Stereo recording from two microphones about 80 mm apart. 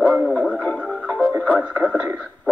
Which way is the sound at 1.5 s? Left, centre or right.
Centre.